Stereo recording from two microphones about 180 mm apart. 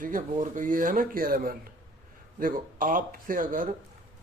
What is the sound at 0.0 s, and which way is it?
Speech, 50° right (ahead or behind).